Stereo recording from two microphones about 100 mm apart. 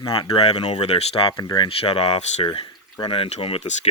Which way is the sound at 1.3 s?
50° left (ahead or behind).